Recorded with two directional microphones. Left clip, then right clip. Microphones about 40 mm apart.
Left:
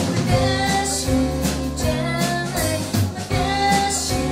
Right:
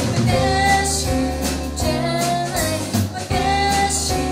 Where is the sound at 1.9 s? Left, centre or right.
Centre.